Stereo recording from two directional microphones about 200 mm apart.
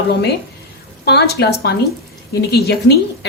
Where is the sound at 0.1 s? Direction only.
55° left (ahead or behind).